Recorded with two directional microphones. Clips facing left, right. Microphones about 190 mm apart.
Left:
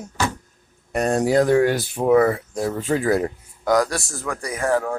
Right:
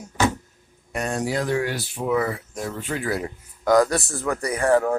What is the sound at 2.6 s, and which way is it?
Speech, 40° left (ahead or behind).